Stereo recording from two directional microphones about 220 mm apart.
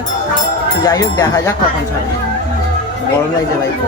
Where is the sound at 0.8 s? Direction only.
15° left (ahead or behind).